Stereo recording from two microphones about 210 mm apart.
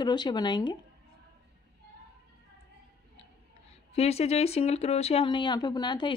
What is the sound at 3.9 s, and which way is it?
Speech, 30° left (ahead or behind).